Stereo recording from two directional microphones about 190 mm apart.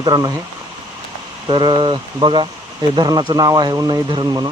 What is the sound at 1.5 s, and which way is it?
Speech, 25° right (ahead or behind).